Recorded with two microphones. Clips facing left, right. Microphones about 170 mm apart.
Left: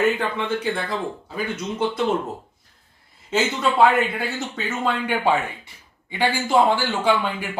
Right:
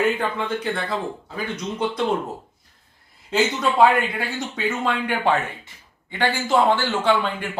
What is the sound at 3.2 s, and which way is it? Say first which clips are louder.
Speech: right 1 dB; centre (ahead or behind).